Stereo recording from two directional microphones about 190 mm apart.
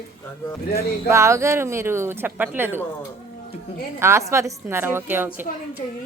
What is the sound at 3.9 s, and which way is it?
A woman's voice, 15° right (ahead or behind).